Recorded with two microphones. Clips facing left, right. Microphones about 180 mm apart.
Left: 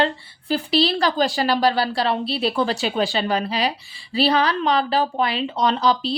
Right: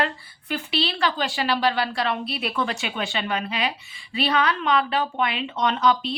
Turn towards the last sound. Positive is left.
turn(degrees=35)  # may be behind; listen again after turning